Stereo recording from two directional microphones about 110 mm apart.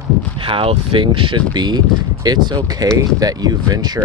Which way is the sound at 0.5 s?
55° right (ahead or behind).